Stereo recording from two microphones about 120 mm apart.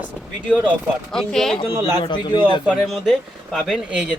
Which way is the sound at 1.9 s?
35° left (ahead or behind).